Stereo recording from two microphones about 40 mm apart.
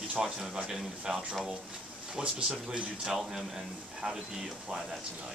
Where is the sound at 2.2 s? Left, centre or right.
Centre.